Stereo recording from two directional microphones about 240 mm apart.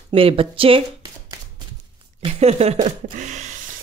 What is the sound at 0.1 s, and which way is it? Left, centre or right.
Speech, right.